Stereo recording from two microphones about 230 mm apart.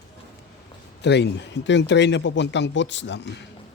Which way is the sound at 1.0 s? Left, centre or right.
Left.